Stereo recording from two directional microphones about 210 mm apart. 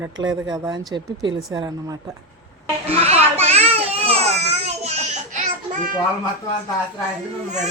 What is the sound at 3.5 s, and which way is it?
Baby cry, 30° right (ahead or behind).